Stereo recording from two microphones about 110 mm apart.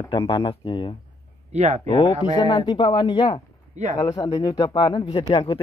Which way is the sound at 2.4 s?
45° left (ahead or behind).